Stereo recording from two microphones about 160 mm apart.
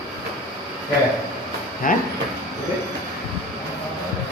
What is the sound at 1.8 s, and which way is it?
Speech, 60° left (ahead or behind).